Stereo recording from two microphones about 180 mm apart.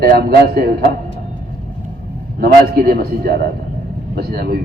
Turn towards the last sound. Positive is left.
turn(degrees=-60)  # may be behind; listen again after turning